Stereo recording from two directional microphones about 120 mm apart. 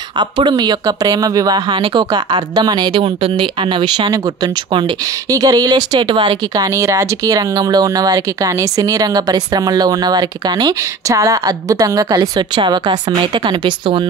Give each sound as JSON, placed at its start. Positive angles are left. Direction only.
{"t": 0.2, "sound": "speech", "side_deg": -40}
{"t": 5.3, "sound": "speech", "side_deg": -30}